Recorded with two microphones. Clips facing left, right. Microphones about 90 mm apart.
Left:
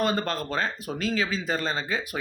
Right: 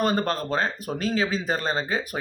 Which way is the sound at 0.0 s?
45° right (ahead or behind).